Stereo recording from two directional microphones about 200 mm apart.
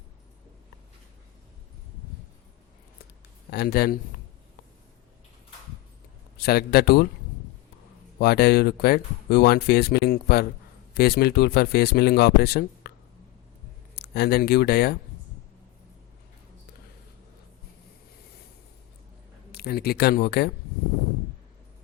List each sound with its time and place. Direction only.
3.5 s speech: 55° left (ahead or behind)
6.3 s speech: 50° left (ahead or behind)
8.2 s speech: 55° left (ahead or behind)
13.9 s speech: 55° left (ahead or behind)
19.5 s speech: 50° left (ahead or behind)